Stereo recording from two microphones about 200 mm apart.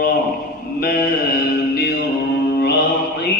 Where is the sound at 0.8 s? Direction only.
50° left (ahead or behind).